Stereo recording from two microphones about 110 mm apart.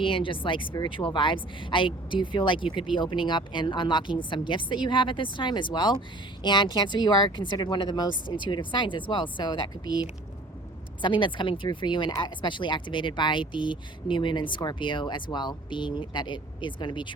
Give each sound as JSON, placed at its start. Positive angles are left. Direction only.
{"t": 0.0, "sound": "speech", "side_deg": 50}
{"t": 11.0, "sound": "speech", "side_deg": 45}